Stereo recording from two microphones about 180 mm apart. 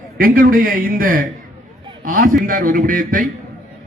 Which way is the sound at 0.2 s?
55° right (ahead or behind).